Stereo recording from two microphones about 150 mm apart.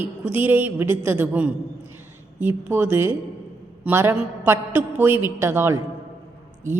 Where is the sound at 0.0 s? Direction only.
15° right (ahead or behind).